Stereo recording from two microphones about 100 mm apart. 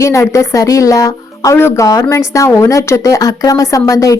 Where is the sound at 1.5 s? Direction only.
25° left (ahead or behind).